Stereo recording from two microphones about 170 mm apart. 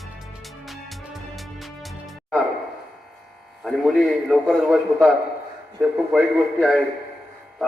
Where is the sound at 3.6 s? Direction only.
Centre (ahead or behind).